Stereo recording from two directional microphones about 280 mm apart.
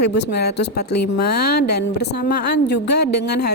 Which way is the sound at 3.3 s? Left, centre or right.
Left.